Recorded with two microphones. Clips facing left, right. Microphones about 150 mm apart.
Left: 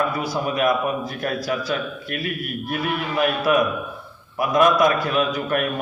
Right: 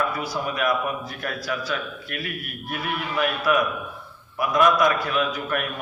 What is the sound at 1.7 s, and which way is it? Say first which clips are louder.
Speech: left 4 dB; 25° left (ahead or behind).